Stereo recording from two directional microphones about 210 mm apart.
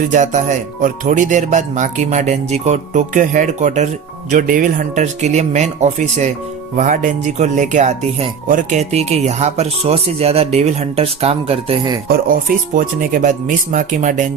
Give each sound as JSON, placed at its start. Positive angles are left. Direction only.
{"t": 0.8, "sound": "speech", "side_deg": -35}
{"t": 12.0, "sound": "speech", "side_deg": -40}